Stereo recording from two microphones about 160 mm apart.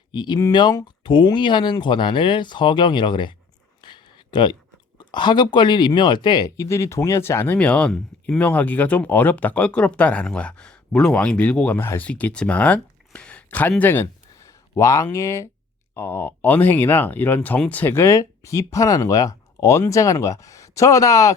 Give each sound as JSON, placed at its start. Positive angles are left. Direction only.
{"t": 0.1, "sound": "speech", "side_deg": 25}
{"t": 3.8, "sound": "a sound", "side_deg": 30}
{"t": 4.9, "sound": "speech", "side_deg": 30}